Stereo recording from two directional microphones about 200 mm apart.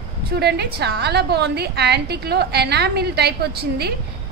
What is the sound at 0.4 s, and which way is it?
A woman's voice, 55° right (ahead or behind).